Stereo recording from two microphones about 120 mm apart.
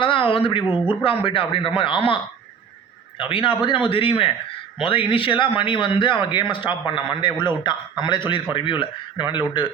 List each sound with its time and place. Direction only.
0.0 s a man's voice: 50° left (ahead or behind)
3.2 s a man's voice: 45° left (ahead or behind)